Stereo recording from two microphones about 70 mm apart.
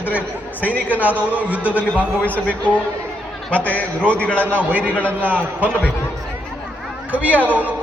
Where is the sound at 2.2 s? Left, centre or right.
Left.